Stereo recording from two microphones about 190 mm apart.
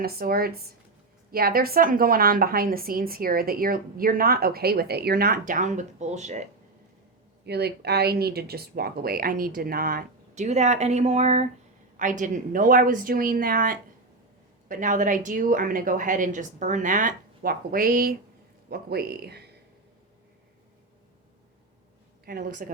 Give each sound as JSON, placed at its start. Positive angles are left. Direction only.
{"t": 0.0, "sound": "a woman's voice", "side_deg": -55}
{"t": 7.4, "sound": "a woman's voice", "side_deg": -60}
{"t": 22.3, "sound": "a woman's voice", "side_deg": -50}